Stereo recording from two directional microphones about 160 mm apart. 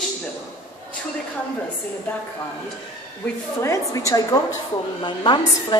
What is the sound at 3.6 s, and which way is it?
A woman's voice, 20° left (ahead or behind).